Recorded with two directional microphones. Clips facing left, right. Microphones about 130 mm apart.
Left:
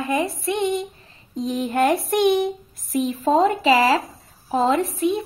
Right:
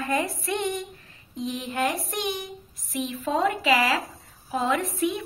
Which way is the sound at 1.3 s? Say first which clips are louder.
Left 7 dB; 45° left (ahead or behind).